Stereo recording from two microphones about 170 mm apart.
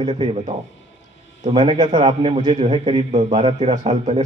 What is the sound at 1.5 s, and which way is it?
A man's voice, 35° right (ahead or behind).